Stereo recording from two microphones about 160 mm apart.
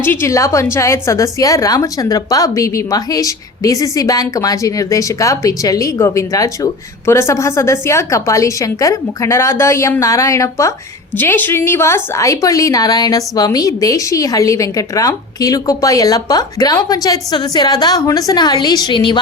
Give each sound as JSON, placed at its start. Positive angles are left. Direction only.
{"t": 0.0, "sound": "a woman's voice", "side_deg": 15}